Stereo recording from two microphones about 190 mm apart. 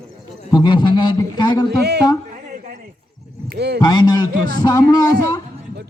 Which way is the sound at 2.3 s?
40° right (ahead or behind).